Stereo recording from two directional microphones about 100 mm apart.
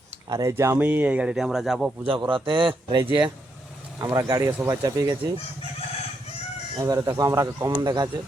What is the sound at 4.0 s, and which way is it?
Speech, 40° right (ahead or behind).